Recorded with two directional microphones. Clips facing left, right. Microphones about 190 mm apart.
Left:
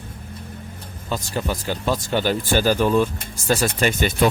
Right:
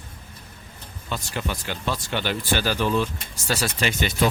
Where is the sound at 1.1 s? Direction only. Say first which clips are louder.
Left 4 dB; 40° left (ahead or behind).